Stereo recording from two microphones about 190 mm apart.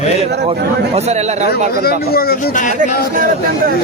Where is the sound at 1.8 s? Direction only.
55° left (ahead or behind).